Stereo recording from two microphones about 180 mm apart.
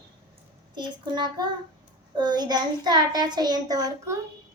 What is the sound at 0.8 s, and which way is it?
A child's voice, 25° right (ahead or behind).